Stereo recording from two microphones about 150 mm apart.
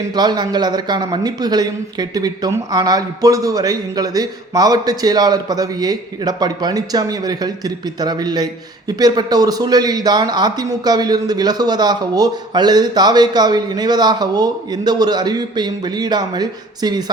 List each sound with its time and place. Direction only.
0.1 s speech: 30° right (ahead or behind)